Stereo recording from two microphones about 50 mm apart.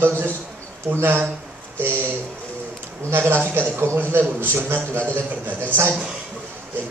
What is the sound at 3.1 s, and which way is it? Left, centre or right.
Speech, right.